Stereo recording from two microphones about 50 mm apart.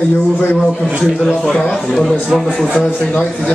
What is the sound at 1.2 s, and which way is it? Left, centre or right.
A man's voice, centre.